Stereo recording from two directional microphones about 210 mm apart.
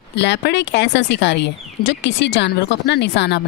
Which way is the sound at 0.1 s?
55° left (ahead or behind).